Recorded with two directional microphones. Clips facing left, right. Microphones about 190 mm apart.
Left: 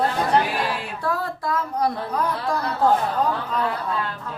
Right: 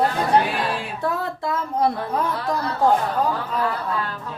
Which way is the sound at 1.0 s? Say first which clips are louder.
Right 1 dB; 25° right (ahead or behind).